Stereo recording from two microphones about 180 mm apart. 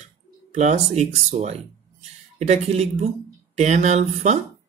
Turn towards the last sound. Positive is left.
turn(degrees=-40)  # may be behind; listen again after turning